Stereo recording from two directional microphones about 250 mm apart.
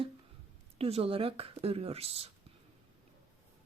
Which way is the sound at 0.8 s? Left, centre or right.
Right.